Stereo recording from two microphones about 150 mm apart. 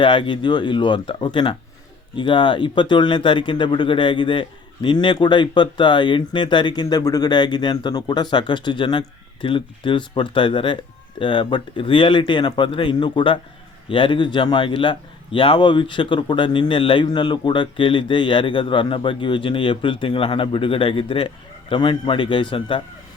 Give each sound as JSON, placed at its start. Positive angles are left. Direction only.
{"t": 0.0, "sound": "a man's voice", "side_deg": 35}